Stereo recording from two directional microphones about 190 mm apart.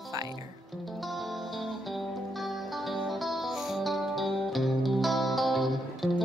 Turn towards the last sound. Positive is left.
turn(degrees=0)  # may be behind; listen again after turning